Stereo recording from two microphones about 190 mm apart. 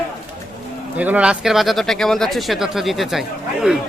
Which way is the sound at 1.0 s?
5° right (ahead or behind).